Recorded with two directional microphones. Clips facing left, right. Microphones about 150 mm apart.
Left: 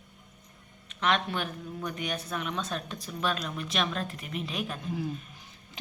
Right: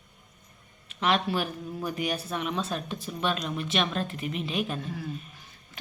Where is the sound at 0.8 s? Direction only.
5° right (ahead or behind).